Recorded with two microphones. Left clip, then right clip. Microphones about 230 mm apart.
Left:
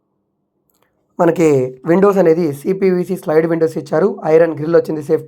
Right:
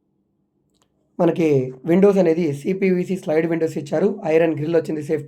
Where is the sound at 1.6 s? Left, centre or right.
Centre.